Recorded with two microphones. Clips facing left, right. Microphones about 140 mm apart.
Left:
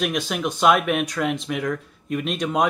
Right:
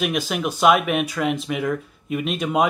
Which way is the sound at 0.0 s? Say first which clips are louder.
Right 1 dB; centre (ahead or behind).